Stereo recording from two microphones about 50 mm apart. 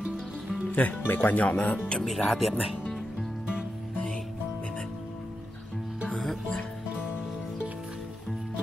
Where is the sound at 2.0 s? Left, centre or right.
Centre.